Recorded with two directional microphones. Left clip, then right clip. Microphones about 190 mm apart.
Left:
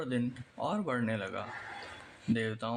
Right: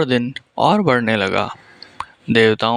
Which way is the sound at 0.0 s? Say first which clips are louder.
Right 17 dB; 50° right (ahead or behind).